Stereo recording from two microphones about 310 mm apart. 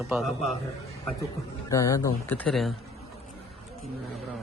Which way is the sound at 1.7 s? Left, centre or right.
Centre.